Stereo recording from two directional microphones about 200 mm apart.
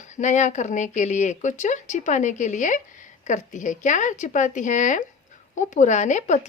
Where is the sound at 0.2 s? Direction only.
35° left (ahead or behind).